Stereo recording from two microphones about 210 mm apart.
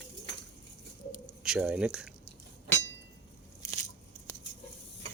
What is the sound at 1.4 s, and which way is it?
Speech, 5° right (ahead or behind).